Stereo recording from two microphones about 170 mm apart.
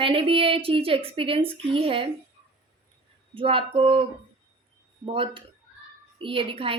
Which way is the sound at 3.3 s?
30° right (ahead or behind).